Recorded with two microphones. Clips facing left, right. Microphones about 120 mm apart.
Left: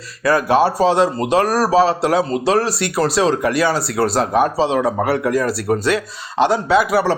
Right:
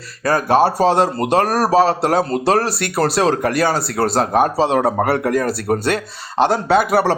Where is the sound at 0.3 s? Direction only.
40° right (ahead or behind).